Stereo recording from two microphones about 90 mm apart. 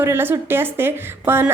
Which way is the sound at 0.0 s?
25° right (ahead or behind).